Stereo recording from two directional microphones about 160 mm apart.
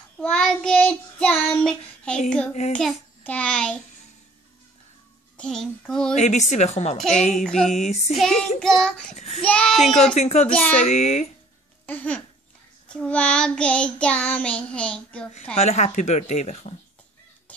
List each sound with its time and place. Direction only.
0.2 s child singing: 5° left (ahead or behind)
2.7 s a child's voice: 5° left (ahead or behind)
5.4 s a child's voice: 5° left (ahead or behind)
6.1 s speech: 45° left (ahead or behind)
7.4 s a child's voice: centre (ahead or behind)
7.7 s speech: 45° left (ahead or behind)
8.2 s a child's voice: 5° left (ahead or behind)
9.1 s speech: 45° left (ahead or behind)
9.4 s a child's voice: 5° left (ahead or behind)
10.1 s speech: 45° left (ahead or behind)
11.8 s babbling: 10° left (ahead or behind)
12.8 s child singing: 5° left (ahead or behind)
15.5 s speech: 40° left (ahead or behind)
17.5 s whispering: 10° left (ahead or behind)